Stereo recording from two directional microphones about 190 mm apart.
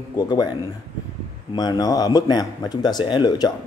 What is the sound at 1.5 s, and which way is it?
Speech, 20° left (ahead or behind).